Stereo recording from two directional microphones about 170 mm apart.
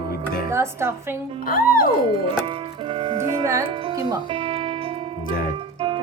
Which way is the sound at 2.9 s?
30° right (ahead or behind).